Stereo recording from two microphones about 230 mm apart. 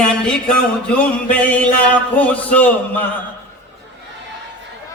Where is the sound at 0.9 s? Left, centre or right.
Centre.